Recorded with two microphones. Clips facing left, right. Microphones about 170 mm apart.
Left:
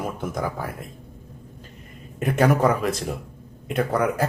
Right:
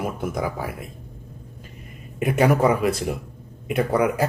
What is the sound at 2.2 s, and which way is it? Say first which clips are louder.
Speech: right 1 dB; 10° right (ahead or behind).